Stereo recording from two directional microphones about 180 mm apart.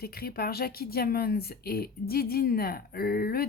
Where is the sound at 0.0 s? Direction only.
55° left (ahead or behind).